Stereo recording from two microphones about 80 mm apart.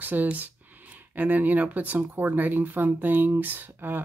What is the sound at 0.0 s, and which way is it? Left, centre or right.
Speech, right.